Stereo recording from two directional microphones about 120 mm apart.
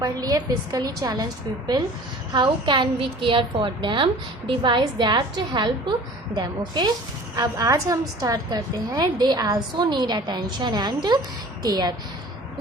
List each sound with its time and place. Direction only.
0.0 s a woman's voice: 30° right (ahead or behind)
7.3 s a woman's voice: 30° right (ahead or behind)